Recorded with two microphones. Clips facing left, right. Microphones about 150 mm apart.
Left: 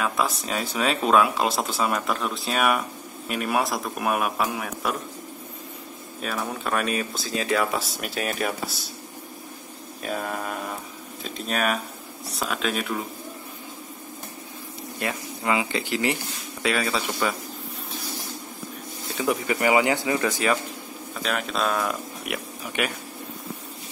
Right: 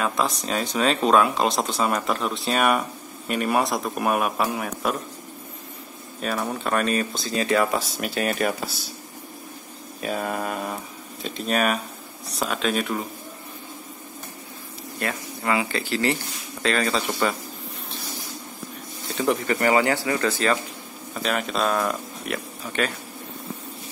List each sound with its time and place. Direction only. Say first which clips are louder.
0.0 s speech: right 1 dB; 5° left (ahead or behind)
6.2 s speech: right 3 dB; centre (ahead or behind)
10.0 s speech: right 3 dB; 5° right (ahead or behind)
15.0 s speech: right 1 dB; 15° left (ahead or behind)
19.1 s speech: right 2 dB; 5° left (ahead or behind)
21.1 s speech: right 2 dB; centre (ahead or behind)
22.2 s speech: right 1 dB; 10° left (ahead or behind)